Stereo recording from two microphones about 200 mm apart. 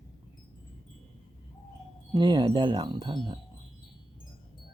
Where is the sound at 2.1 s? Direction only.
20° right (ahead or behind).